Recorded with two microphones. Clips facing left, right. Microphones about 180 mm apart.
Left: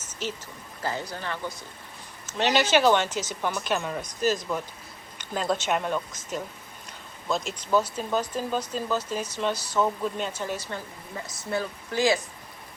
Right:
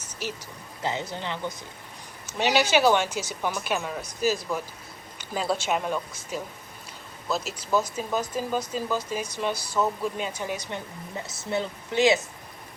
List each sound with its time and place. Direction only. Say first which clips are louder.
0.1 s a sound: left 1 dB; 10° right (ahead or behind)
0.8 s speech: right 1 dB; 20° right (ahead or behind)
2.2 s speech: even; 10° right (ahead or behind)